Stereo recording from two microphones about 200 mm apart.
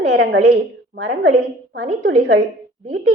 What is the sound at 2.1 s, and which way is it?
Speech, 75° right (ahead or behind).